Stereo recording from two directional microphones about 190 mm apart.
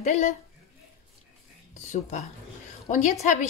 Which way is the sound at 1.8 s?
40° left (ahead or behind).